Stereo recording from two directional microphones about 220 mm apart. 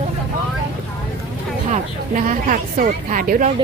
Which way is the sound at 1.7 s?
35° right (ahead or behind).